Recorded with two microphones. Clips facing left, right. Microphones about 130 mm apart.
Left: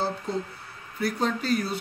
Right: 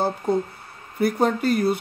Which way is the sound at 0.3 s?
55° right (ahead or behind).